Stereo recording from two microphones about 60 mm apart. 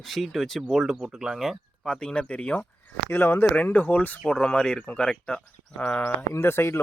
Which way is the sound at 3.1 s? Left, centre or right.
Left.